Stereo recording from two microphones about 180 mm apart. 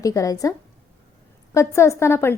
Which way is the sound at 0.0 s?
20° left (ahead or behind).